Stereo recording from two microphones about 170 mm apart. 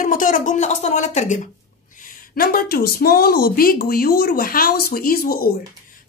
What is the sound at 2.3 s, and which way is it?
A woman's voice, 60° left (ahead or behind).